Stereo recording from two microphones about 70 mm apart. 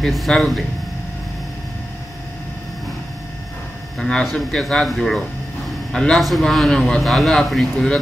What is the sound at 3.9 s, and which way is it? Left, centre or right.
A man's voice, centre.